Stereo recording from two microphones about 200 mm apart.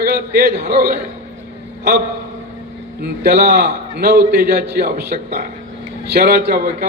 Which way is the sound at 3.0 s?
50° right (ahead or behind).